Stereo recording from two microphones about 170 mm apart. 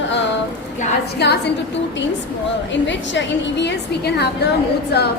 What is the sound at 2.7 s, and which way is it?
A woman's voice, 90° left.